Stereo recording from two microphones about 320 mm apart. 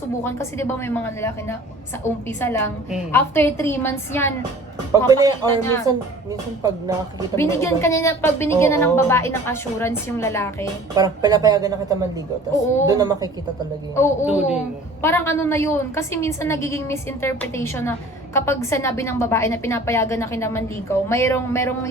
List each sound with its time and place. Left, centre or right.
0.3 s a woman's voice: centre
2.0 s a woman's voice: left
2.4 s a woman's voice: centre
4.9 s speech: centre
7.3 s a woman's voice: centre
10.9 s speech: centre
13.9 s a woman's voice: centre
14.3 s a woman's voice: centre
15.0 s a woman's voice: centre